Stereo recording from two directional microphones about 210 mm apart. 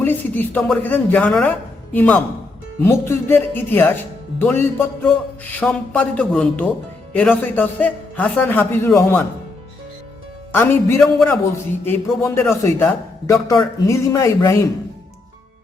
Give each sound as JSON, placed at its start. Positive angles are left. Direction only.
{"t": 0.0, "sound": "a man's voice", "side_deg": 10}
{"t": 10.5, "sound": "a man's voice", "side_deg": 10}